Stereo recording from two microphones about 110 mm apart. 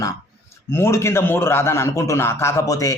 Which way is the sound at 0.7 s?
25° left (ahead or behind).